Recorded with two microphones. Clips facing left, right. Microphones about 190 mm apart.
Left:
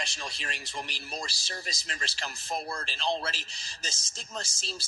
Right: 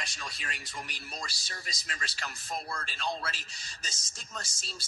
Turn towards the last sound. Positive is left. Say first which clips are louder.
# left 5 dB
turn(degrees=25)  # may be behind; listen again after turning